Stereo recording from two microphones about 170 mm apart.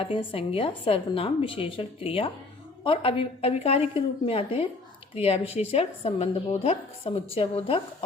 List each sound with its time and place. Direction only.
0.0 s speech: 30° left (ahead or behind)